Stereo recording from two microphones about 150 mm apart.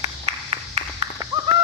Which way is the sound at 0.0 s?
40° right (ahead or behind).